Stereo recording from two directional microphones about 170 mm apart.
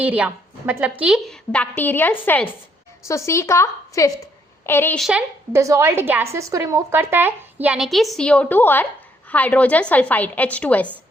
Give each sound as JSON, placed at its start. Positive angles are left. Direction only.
{"t": 0.0, "sound": "a woman's voice", "side_deg": -10}
{"t": 4.9, "sound": "a woman's voice", "side_deg": 0}
{"t": 5.5, "sound": "a woman's voice", "side_deg": -15}